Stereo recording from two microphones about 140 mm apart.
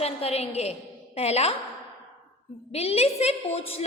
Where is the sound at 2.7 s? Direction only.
45° left (ahead or behind).